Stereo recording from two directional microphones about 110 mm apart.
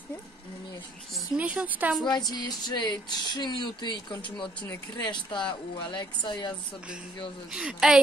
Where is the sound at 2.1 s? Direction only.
40° left (ahead or behind).